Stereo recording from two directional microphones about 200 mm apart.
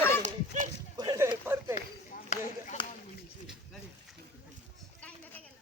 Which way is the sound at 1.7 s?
40° left (ahead or behind).